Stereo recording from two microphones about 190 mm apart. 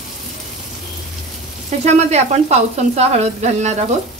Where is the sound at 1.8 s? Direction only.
35° right (ahead or behind).